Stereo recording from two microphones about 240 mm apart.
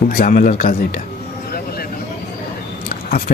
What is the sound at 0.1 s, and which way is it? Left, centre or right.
Speech, left.